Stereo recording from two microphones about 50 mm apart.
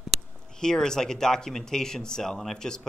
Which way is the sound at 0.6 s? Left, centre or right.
Centre.